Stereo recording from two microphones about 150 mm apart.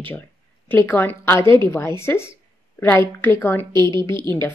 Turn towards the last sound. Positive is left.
turn(degrees=20)  # may be behind; listen again after turning